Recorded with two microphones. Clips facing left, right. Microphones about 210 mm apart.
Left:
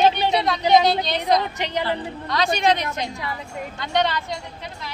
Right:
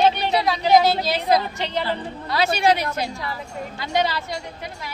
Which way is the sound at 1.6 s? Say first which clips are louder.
Even; 15° left (ahead or behind).